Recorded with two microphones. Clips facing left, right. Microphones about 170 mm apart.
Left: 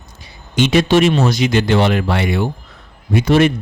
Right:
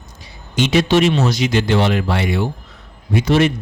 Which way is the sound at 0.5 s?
55° left (ahead or behind).